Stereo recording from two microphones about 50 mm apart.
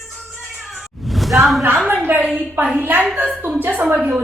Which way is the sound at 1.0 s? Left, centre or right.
Centre.